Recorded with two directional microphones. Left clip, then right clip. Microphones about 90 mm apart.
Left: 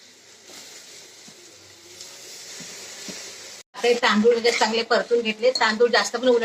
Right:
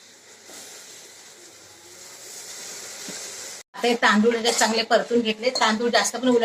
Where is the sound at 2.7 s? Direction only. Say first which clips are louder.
Right 1 dB; 30° right (ahead or behind).